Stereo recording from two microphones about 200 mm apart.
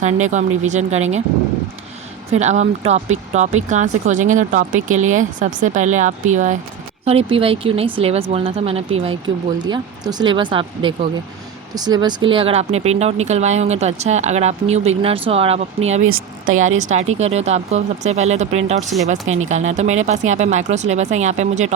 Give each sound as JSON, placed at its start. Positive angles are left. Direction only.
{"t": 0.0, "sound": "speech", "side_deg": -35}
{"t": 2.3, "sound": "speech", "side_deg": -35}